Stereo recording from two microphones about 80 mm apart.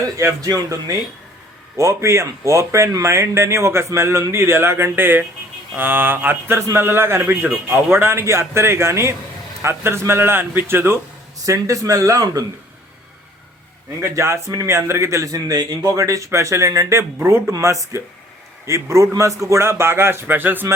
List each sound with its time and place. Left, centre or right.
0.0 s speech: right
1.7 s a man's voice: right
7.5 s speech: centre
7.9 s a man's voice: right
11.4 s speech: right
14.0 s speech: right